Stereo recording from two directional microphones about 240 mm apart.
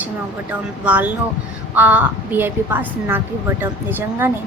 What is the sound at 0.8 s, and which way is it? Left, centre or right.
A woman's voice, centre.